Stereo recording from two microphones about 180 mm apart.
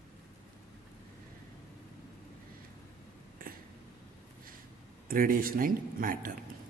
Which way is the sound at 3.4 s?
50° right (ahead or behind).